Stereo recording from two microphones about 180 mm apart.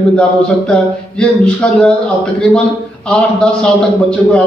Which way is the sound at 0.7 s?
5° left (ahead or behind).